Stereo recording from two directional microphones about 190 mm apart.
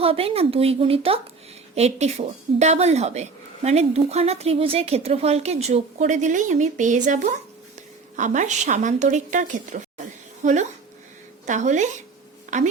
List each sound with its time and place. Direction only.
0.0 s speech: 30° right (ahead or behind)